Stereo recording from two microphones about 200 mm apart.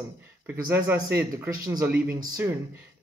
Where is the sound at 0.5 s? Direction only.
10° right (ahead or behind).